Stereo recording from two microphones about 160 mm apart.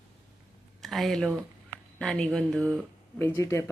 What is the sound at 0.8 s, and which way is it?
Speech, centre (ahead or behind).